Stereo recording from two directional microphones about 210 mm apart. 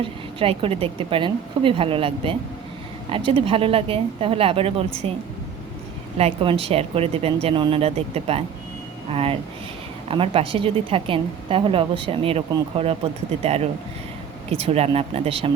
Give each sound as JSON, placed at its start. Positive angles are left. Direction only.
{"t": 0.0, "sound": "a woman's voice", "side_deg": -25}
{"t": 6.1, "sound": "a woman's voice", "side_deg": -25}